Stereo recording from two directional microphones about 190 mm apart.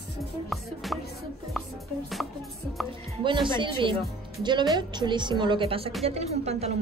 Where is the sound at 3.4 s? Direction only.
25° right (ahead or behind).